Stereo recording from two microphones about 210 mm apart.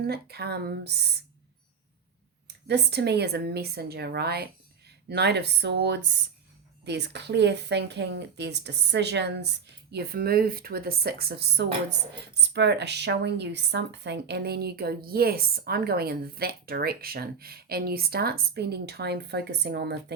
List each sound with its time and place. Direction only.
0.1 s speech: 50° right (ahead or behind)
2.6 s speech: 55° right (ahead or behind)